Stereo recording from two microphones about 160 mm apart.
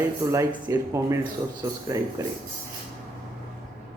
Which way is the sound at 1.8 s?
20° right (ahead or behind).